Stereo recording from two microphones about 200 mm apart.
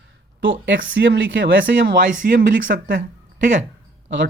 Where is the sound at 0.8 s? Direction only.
55° right (ahead or behind).